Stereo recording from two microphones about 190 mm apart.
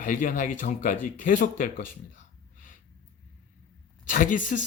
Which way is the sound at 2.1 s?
45° left (ahead or behind).